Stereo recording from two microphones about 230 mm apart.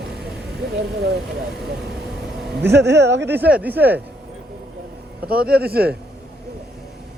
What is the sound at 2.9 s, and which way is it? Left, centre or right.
Speech, right.